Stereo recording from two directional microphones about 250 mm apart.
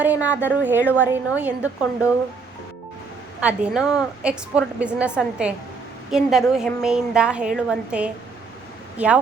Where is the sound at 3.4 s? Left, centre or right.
Centre.